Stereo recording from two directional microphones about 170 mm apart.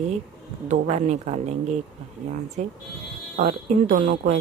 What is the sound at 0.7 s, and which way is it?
Speech, 40° right (ahead or behind).